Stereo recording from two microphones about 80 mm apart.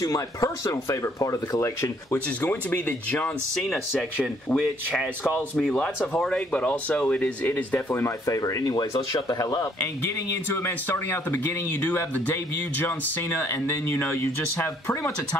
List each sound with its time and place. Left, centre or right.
0.0 s speech: left
2.1 s speech: left
5.6 s speech: centre
8.0 s speech: left
8.9 s speech: left
9.4 s speech: left